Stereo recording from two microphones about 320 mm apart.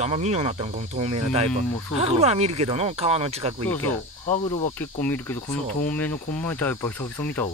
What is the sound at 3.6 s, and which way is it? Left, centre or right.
Speech, centre.